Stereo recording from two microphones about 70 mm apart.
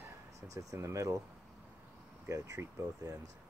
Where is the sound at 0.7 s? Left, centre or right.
Right.